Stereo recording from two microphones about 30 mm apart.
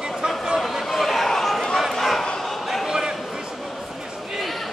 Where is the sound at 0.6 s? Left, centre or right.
Centre.